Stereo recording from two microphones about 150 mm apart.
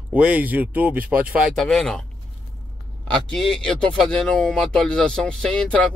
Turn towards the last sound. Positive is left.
turn(degrees=5)  # may be behind; listen again after turning